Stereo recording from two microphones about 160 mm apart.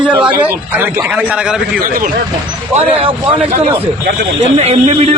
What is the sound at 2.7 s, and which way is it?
Speech, 35° right (ahead or behind).